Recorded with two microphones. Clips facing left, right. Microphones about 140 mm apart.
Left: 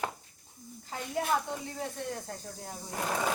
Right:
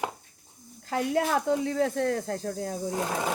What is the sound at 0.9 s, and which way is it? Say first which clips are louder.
Speech: right 6 dB; 90° right.